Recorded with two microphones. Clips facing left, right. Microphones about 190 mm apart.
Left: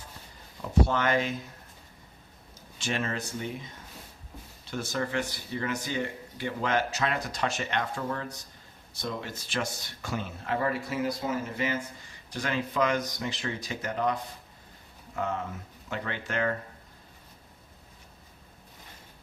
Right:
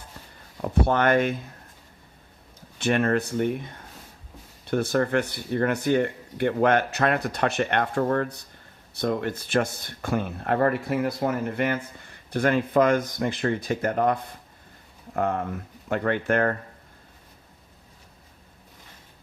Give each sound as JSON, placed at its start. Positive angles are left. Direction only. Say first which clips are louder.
{"t": 0.6, "sound": "speech", "louder": "right 4 dB", "side_deg": -60}
{"t": 2.7, "sound": "speech", "louder": "right 9 dB", "side_deg": -60}